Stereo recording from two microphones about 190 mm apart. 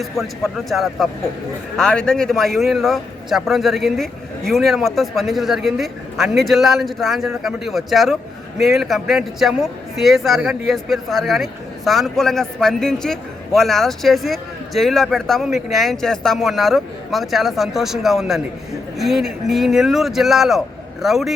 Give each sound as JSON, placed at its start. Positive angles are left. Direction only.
{"t": 0.0, "sound": "a man's voice", "side_deg": 0}